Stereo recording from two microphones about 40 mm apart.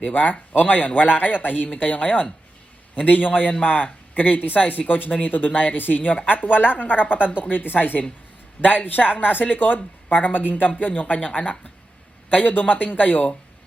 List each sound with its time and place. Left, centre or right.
0.0 s speech: left
1.7 s speech: left
12.3 s speech: left